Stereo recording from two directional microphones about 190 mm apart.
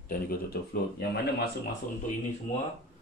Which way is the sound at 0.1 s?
50° left (ahead or behind).